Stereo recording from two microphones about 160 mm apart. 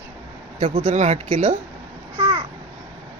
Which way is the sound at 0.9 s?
45° right (ahead or behind).